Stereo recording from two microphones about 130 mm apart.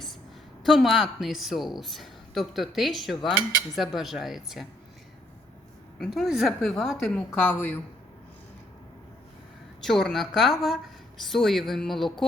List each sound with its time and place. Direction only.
0.6 s speech: centre (ahead or behind)
3.2 s cutlery: 35° left (ahead or behind)
3.8 s speech: centre (ahead or behind)
6.0 s speech: centre (ahead or behind)
9.8 s speech: 5° left (ahead or behind)